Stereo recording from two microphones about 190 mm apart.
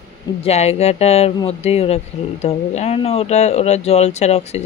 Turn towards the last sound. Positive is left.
turn(degrees=35)  # may be behind; listen again after turning